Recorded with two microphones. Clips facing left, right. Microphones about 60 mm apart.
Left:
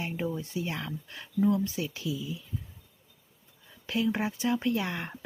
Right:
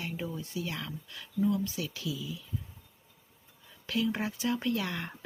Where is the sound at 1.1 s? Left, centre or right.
Left.